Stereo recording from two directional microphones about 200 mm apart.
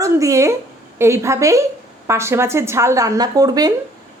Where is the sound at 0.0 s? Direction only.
15° right (ahead or behind).